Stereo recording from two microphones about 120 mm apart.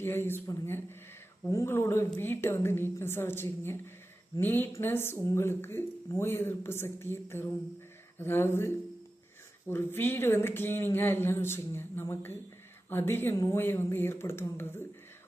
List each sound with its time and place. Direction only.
0.0 s speech: 20° left (ahead or behind)